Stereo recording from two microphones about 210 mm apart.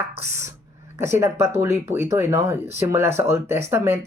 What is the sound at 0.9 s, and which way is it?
Speech, 10° right (ahead or behind).